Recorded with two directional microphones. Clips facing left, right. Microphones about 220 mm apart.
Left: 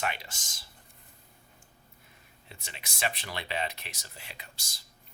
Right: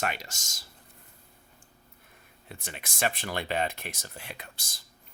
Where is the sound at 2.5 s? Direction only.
50° right (ahead or behind).